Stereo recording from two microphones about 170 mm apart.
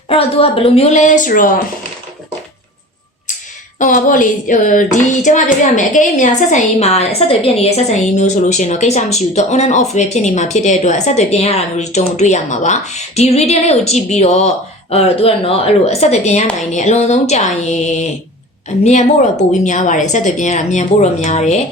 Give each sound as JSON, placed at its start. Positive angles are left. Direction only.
{"t": 0.1, "sound": "speech", "side_deg": 35}
{"t": 3.8, "sound": "speech", "side_deg": 50}
{"t": 19.6, "sound": "speech", "side_deg": 45}